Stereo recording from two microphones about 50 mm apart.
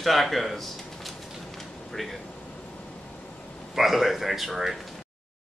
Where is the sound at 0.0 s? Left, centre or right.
Centre.